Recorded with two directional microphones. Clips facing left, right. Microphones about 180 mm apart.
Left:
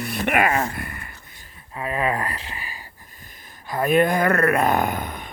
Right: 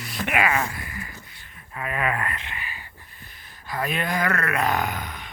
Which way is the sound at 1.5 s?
30° left (ahead or behind).